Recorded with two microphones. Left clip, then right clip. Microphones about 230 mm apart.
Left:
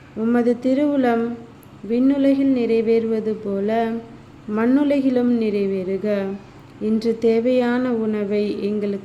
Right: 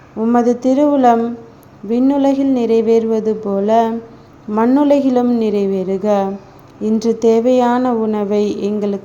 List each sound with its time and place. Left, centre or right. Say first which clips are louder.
0.3 s speech: right 5 dB; centre